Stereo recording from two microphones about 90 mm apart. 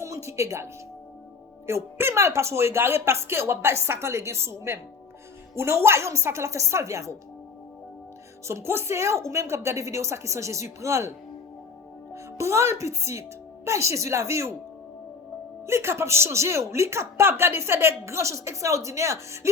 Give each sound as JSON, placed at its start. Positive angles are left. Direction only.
{"t": 0.0, "sound": "music", "side_deg": -35}
{"t": 1.6, "sound": "a woman's voice", "side_deg": -30}
{"t": 8.4, "sound": "a woman's voice", "side_deg": -30}
{"t": 12.1, "sound": "a woman's voice", "side_deg": -35}
{"t": 15.6, "sound": "a woman's voice", "side_deg": -30}